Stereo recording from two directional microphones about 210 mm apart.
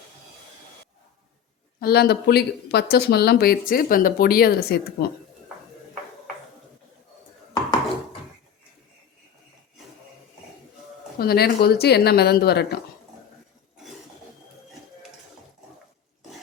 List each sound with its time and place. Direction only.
1.8 s speech: 50° left (ahead or behind)
11.2 s speech: 45° left (ahead or behind)